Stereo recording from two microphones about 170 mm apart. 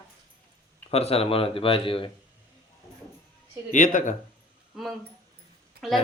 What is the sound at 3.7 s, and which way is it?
Speech, 50° left (ahead or behind).